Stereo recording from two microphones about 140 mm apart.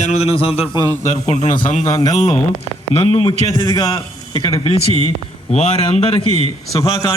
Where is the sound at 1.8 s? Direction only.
25° left (ahead or behind).